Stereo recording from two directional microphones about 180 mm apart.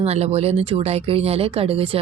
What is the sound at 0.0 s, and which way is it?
Speech, 35° right (ahead or behind).